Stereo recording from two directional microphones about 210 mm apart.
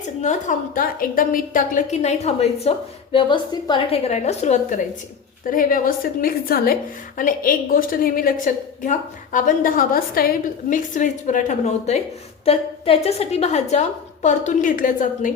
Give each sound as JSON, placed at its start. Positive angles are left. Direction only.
{"t": 0.2, "sound": "a woman's voice", "side_deg": 35}